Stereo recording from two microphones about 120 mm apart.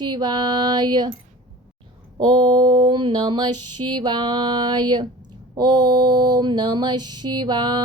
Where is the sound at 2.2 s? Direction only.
40° right (ahead or behind).